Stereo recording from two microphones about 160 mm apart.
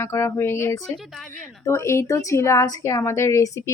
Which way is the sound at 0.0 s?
15° left (ahead or behind).